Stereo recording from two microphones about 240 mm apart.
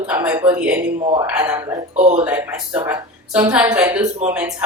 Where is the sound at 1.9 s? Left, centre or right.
Right.